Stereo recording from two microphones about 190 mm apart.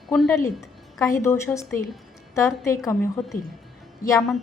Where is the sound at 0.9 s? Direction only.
15° left (ahead or behind).